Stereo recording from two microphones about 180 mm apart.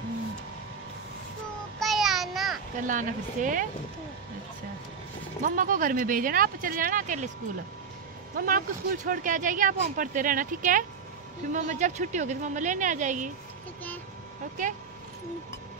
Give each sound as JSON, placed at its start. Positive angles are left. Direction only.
{"t": 1.8, "sound": "child singing", "side_deg": 0}
{"t": 2.8, "sound": "speech", "side_deg": -45}
{"t": 5.4, "sound": "speech", "side_deg": -50}
{"t": 8.4, "sound": "speech", "side_deg": -50}